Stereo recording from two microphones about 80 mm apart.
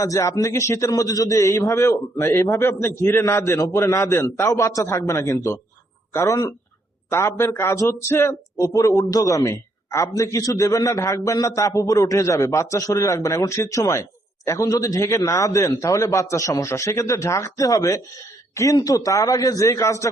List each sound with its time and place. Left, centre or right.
0.0 s a man's voice: left